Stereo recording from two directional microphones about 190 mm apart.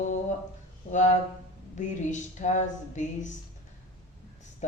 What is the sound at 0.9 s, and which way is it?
Speech, 40° left (ahead or behind).